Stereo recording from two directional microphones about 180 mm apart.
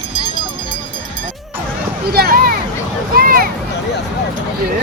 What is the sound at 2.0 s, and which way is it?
Speech, 60° right (ahead or behind).